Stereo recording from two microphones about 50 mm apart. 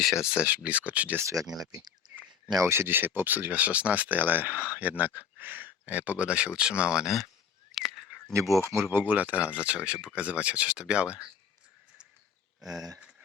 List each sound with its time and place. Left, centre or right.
0.0 s speech: centre
0.4 s speech: right
1.2 s speech: right
2.6 s speech: right
2.8 s speech: right; by 7.1 s centre
7.8 s a sound: centre
8.3 s speech: right
8.8 s speech: right
12.6 s speech: centre